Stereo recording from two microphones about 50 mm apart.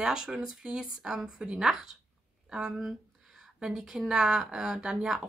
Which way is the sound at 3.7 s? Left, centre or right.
Centre.